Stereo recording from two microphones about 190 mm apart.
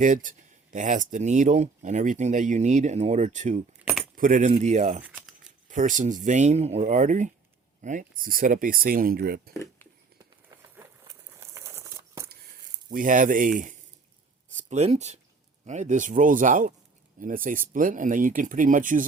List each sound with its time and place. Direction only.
0.0 s speech: 45° right (ahead or behind)
5.0 s crumpling: 5° right (ahead or behind)
5.6 s speech: 40° right (ahead or behind)
11.3 s crumpling: 15° right (ahead or behind)
12.9 s speech: 45° right (ahead or behind)